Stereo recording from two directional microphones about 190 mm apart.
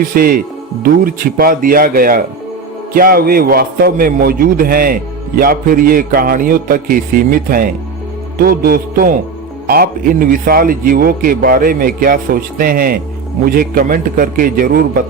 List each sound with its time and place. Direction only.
0.1 s a man's voice: 50° right (ahead or behind)